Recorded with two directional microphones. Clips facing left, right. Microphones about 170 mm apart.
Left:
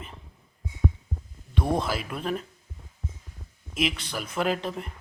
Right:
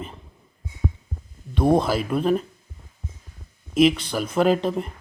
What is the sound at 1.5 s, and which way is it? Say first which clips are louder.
Speech: right 8 dB; 35° right (ahead or behind).